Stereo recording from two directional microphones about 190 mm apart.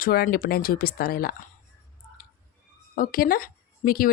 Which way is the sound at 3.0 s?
50° left (ahead or behind).